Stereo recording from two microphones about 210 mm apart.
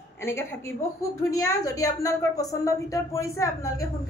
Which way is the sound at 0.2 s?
10° left (ahead or behind).